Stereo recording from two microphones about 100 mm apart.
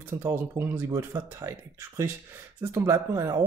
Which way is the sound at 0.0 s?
25° right (ahead or behind).